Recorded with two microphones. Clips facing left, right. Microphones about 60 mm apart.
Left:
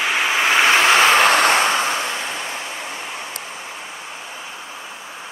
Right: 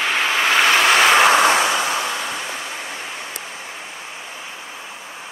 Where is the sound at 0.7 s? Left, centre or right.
Left.